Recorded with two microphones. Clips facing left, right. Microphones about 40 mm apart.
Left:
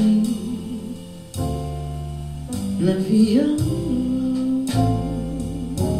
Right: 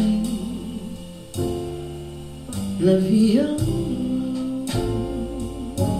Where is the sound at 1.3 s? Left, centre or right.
Right.